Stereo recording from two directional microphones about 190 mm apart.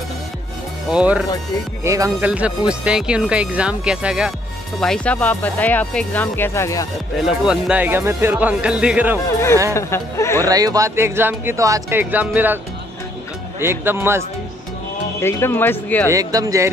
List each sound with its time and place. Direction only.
0.9 s speech: 5° right (ahead or behind)
1.8 s speech: 15° right (ahead or behind); by 6.9 s 15° left (ahead or behind)
7.2 s speech: 5° right (ahead or behind)
9.8 s speech: 15° left (ahead or behind)
10.4 s speech: 20° right (ahead or behind)
13.6 s speech: 10° right (ahead or behind)
15.1 s speech: 10° left (ahead or behind)
16.1 s speech: 20° right (ahead or behind)